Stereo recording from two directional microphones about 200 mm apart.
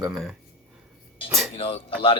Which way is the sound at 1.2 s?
Centre (ahead or behind).